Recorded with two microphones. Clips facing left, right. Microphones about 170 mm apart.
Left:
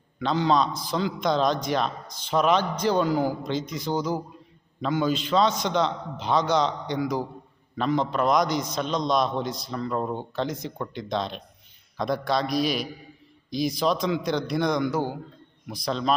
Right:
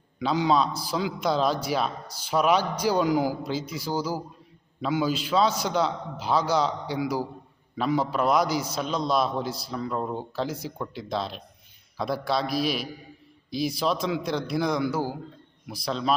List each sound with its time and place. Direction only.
0.2 s a man's voice: 10° right (ahead or behind)